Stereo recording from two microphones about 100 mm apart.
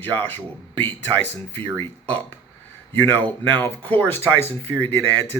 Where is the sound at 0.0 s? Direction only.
20° left (ahead or behind).